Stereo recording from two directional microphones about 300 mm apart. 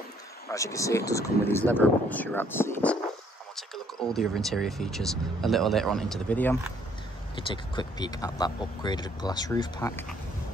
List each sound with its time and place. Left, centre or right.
0.5 s speech: centre
7.3 s speech: centre